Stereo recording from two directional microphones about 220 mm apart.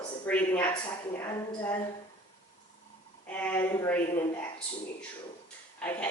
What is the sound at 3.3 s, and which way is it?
Speech, 5° left (ahead or behind).